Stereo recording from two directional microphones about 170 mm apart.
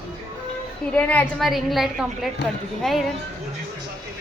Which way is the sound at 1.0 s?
10° left (ahead or behind).